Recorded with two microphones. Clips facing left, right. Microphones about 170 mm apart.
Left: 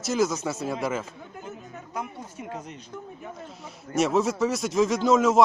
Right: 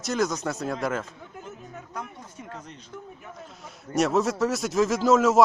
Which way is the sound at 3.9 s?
Centre (ahead or behind).